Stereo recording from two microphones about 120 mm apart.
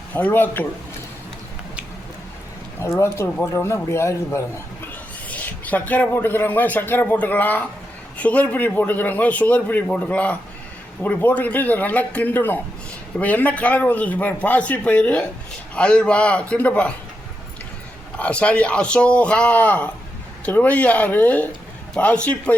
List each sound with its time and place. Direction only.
0.1 s speech: 15° left (ahead or behind)
2.8 s speech: 20° left (ahead or behind)
18.2 s speech: 10° left (ahead or behind)